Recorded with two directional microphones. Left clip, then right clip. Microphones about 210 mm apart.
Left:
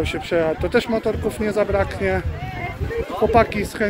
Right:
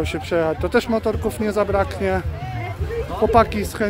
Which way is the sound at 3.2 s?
10° right (ahead or behind).